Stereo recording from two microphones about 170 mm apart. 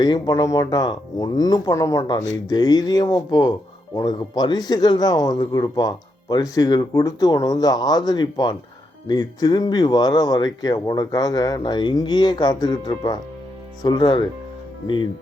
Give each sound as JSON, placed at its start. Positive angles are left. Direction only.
{"t": 0.0, "sound": "speech", "side_deg": 25}